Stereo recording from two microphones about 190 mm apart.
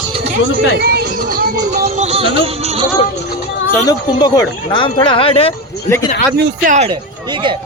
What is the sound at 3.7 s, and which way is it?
Speech, 20° left (ahead or behind).